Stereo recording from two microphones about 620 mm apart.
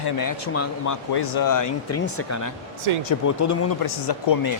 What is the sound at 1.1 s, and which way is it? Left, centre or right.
Speech, left.